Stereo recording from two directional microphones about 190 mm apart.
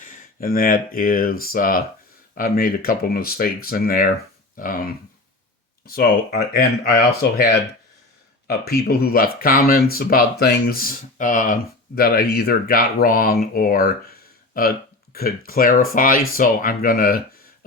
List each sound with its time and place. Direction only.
0.0 s speech: 45° left (ahead or behind)
8.6 s speech: 55° left (ahead or behind)
11.9 s speech: 55° left (ahead or behind)